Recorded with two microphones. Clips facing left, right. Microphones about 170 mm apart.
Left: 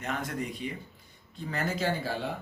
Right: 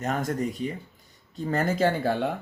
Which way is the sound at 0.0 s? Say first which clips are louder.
Right 6 dB; 45° right (ahead or behind).